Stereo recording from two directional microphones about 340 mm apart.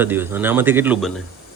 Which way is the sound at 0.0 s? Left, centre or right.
Centre.